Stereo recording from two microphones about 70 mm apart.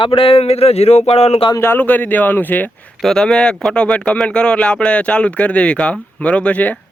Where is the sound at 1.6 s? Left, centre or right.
Left.